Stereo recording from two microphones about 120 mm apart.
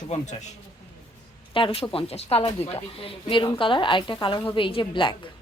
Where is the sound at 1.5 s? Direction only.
45° left (ahead or behind).